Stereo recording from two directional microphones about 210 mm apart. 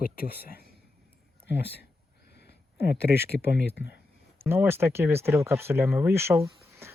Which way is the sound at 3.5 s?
55° left (ahead or behind).